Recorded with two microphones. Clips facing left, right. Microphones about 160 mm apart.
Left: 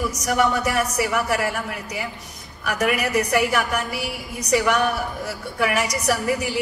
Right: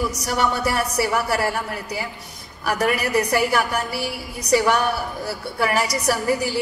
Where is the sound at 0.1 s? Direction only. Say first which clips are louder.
Left 2 dB; 35° right (ahead or behind).